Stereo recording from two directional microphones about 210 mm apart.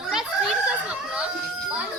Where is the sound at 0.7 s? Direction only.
5° right (ahead or behind).